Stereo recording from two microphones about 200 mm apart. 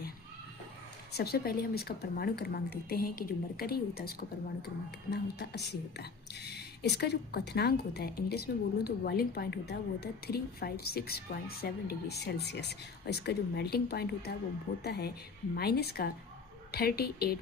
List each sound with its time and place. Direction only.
1.1 s speech: 50° left (ahead or behind)
15.5 s speech: 50° left (ahead or behind)